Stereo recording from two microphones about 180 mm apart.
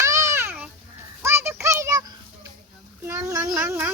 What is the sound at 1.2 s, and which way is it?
Music, 15° right (ahead or behind).